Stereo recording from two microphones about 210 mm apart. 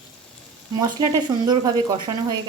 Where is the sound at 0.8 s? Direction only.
15° right (ahead or behind).